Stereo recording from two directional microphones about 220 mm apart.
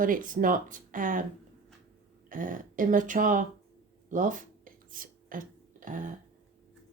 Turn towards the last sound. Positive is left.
turn(degrees=-35)  # may be behind; listen again after turning